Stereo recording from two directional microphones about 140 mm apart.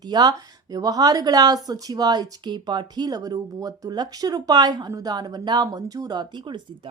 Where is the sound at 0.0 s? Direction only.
30° right (ahead or behind).